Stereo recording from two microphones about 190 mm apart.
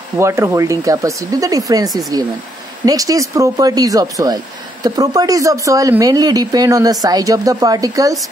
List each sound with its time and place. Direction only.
0.2 s speech: 15° right (ahead or behind)